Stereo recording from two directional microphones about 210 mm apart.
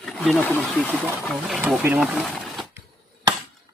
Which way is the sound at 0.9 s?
10° right (ahead or behind).